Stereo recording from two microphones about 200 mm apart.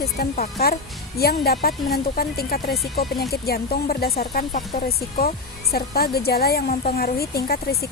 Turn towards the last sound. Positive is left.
turn(degrees=50)  # may be behind; listen again after turning